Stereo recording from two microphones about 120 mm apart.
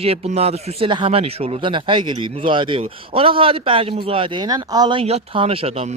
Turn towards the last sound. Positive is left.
turn(degrees=-60)  # may be behind; listen again after turning